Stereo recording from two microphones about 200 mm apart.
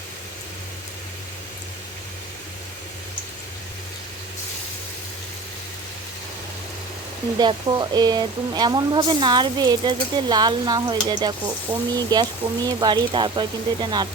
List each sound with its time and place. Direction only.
7.3 s speech: 20° right (ahead or behind)